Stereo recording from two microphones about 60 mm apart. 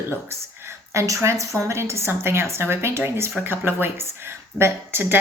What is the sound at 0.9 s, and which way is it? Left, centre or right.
A woman's voice, right.